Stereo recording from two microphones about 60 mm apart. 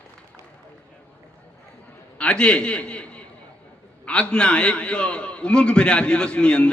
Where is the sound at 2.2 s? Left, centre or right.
Centre.